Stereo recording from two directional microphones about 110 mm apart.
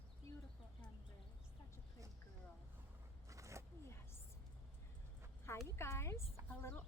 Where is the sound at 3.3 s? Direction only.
25° right (ahead or behind).